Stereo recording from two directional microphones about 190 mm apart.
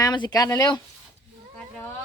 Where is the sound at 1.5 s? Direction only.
5° left (ahead or behind).